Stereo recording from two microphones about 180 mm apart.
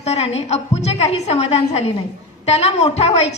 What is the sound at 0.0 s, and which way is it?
A woman's voice, 35° left (ahead or behind).